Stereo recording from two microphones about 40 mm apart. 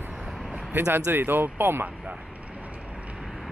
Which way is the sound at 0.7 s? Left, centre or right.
Right.